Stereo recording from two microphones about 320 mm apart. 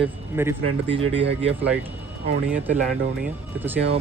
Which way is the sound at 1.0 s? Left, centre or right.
Right.